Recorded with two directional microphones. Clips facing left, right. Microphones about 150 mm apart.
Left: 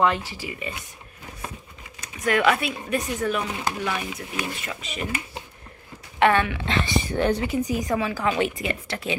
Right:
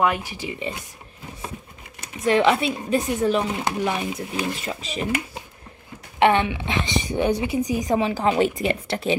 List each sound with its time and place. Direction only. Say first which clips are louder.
0.0 s speech: even; 15° right (ahead or behind)
2.0 s speech: right 4 dB; 25° right (ahead or behind)
6.1 s speech: right 2 dB; 25° right (ahead or behind)